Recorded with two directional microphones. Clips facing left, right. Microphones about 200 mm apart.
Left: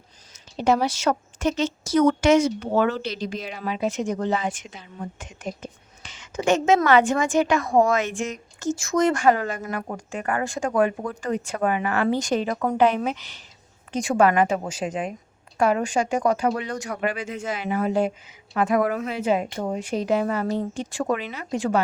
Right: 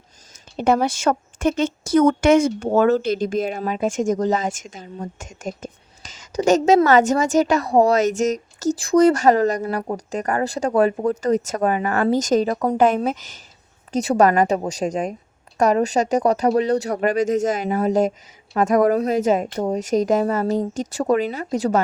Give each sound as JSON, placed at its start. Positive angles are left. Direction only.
{"t": 0.5, "sound": "a woman's voice", "side_deg": -55}